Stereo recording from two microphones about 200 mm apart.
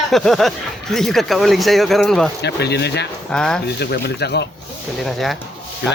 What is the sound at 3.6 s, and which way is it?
Speech, 55° left (ahead or behind).